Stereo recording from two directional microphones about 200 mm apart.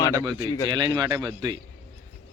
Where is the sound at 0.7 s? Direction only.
20° right (ahead or behind).